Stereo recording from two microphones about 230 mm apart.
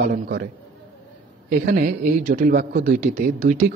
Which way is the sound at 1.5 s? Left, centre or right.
Right.